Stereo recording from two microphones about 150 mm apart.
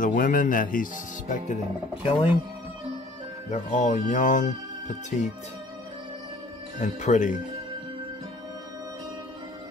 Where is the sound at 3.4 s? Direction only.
50° left (ahead or behind).